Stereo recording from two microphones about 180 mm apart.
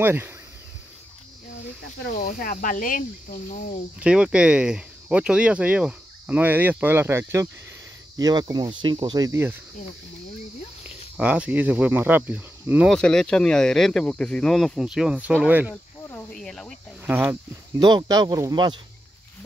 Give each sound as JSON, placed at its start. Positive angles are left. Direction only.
{"t": 0.0, "sound": "speech", "side_deg": -10}
{"t": 2.1, "sound": "cricket", "side_deg": 45}
{"t": 4.0, "sound": "speech", "side_deg": -5}
{"t": 11.1, "sound": "speech", "side_deg": -5}
{"t": 12.9, "sound": "speech", "side_deg": 5}
{"t": 15.7, "sound": "cricket", "side_deg": 10}
{"t": 17.0, "sound": "speech", "side_deg": -10}
{"t": 17.7, "sound": "speech", "side_deg": -25}